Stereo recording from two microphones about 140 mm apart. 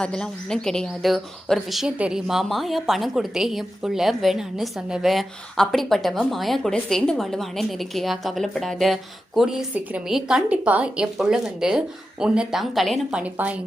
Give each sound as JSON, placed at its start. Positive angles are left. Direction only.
{"t": 0.0, "sound": "speech", "side_deg": 5}